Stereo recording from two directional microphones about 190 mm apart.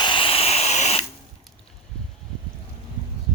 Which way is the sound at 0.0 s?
25° left (ahead or behind).